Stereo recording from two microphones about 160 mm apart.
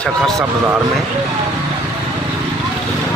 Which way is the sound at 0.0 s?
Centre (ahead or behind).